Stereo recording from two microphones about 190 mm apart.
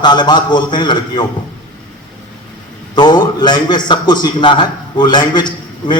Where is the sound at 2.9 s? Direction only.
20° left (ahead or behind).